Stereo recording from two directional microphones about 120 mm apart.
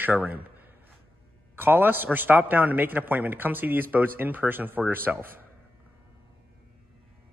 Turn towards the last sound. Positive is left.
turn(degrees=-15)  # may be behind; listen again after turning